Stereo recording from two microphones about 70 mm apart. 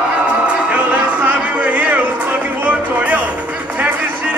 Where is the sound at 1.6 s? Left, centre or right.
Centre.